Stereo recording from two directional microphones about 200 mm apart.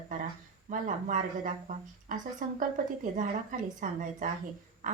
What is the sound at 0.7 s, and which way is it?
A woman's voice, 40° right (ahead or behind).